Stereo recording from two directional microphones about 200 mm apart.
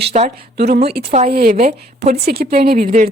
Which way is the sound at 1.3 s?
45° right (ahead or behind).